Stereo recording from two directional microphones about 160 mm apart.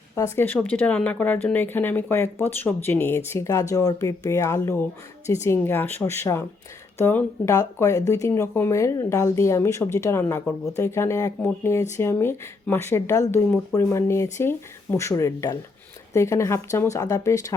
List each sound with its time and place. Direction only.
0.3 s speech: 10° left (ahead or behind)